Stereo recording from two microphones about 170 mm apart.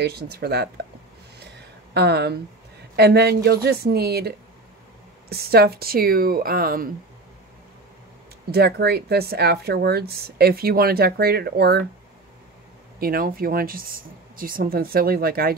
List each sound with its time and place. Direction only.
0.0 s speech: 70° right (ahead or behind)
2.0 s speech: 75° right (ahead or behind)
5.3 s speech: 65° right (ahead or behind)
8.5 s speech: 70° right (ahead or behind)
13.0 s speech: 60° right (ahead or behind)